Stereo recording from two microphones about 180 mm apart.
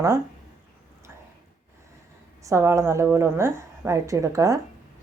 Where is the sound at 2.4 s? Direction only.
15° right (ahead or behind).